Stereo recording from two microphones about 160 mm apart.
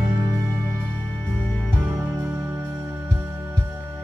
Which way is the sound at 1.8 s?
15° right (ahead or behind).